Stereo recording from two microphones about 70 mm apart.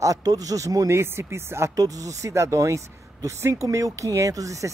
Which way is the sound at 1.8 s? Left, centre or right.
Right.